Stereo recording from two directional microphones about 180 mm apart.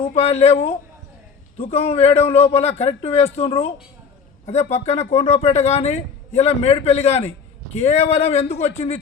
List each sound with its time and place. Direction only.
0.0 s a man's voice: 35° left (ahead or behind)